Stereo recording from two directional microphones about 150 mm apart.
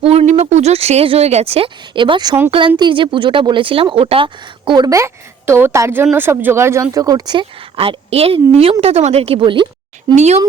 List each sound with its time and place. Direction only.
0.0 s a sound: 40° right (ahead or behind)
0.3 s speech: 50° right (ahead or behind)
10.2 s speech: 45° right (ahead or behind)